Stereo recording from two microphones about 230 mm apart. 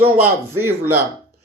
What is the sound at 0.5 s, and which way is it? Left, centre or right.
Speech, centre.